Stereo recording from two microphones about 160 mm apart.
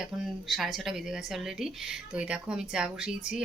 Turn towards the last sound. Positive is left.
turn(degrees=-5)  # may be behind; listen again after turning